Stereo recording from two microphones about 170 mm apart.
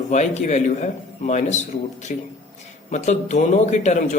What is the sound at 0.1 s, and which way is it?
A man's voice, 45° left (ahead or behind).